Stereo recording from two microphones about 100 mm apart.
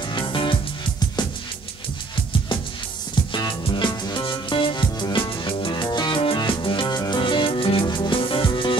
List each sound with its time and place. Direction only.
0.1 s music: 55° left (ahead or behind)
3.3 s music: 55° left (ahead or behind)
6.1 s music: 60° left (ahead or behind)
7.8 s music: 50° left (ahead or behind)